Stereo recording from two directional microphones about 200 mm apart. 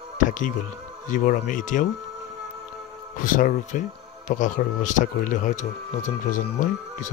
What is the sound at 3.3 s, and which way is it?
Speech, 45° left (ahead or behind).